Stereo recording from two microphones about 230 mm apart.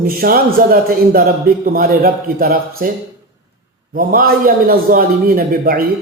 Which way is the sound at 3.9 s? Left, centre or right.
Right.